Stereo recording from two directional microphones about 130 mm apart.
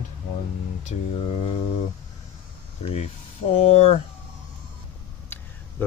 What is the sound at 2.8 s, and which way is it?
Speech, 55° left (ahead or behind).